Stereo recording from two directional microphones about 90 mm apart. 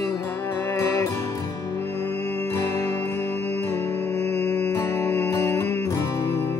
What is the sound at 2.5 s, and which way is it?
Music, 30° left (ahead or behind).